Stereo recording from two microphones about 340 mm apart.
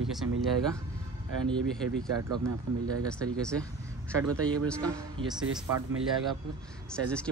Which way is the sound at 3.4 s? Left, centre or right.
Centre.